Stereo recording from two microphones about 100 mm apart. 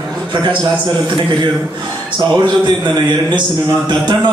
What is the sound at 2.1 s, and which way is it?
Speech, 50° right (ahead or behind).